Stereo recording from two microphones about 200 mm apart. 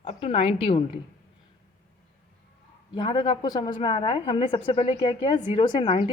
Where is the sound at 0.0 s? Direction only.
30° left (ahead or behind).